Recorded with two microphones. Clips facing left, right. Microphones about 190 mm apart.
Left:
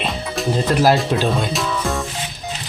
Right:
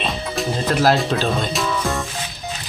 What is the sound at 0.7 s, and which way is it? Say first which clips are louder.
Speech: left 1 dB; 10° left (ahead or behind).